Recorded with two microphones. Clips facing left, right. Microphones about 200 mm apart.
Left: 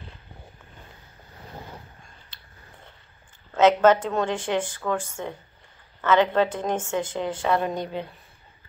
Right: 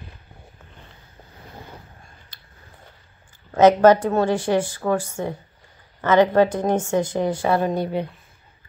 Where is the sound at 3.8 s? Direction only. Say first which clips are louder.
Right 4 dB; 10° right (ahead or behind).